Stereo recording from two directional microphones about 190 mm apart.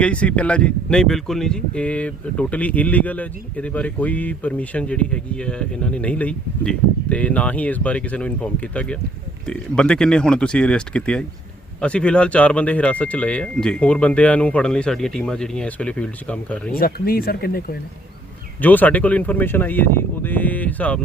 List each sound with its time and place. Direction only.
0.0 s speech: 5° left (ahead or behind)
16.7 s speech: 50° left (ahead or behind)
18.6 s speech: 10° left (ahead or behind)